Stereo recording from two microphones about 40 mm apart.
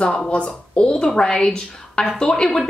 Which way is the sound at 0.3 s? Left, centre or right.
Left.